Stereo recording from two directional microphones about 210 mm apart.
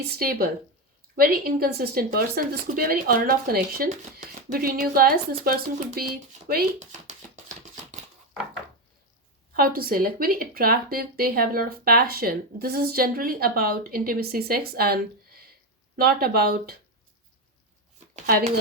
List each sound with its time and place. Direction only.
0.0 s speech: 45° right (ahead or behind)
9.6 s speech: 45° right (ahead or behind)